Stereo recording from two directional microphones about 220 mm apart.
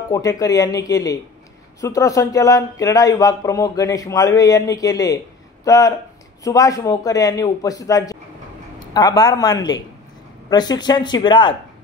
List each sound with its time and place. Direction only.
0.1 s speech: 15° left (ahead or behind)